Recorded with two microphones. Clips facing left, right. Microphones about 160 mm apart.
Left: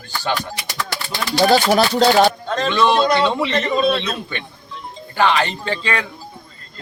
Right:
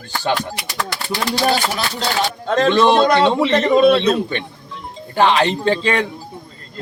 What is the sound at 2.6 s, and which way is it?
Speech, 35° right (ahead or behind).